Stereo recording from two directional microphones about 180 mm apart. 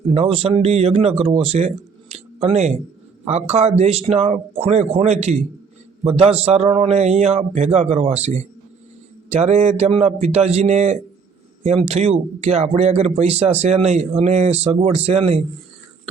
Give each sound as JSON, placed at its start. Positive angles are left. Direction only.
{"t": 0.1, "sound": "speech", "side_deg": -35}